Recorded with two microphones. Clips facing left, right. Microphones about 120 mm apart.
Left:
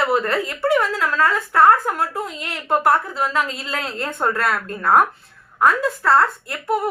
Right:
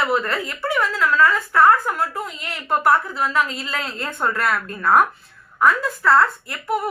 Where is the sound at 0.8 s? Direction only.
30° left (ahead or behind).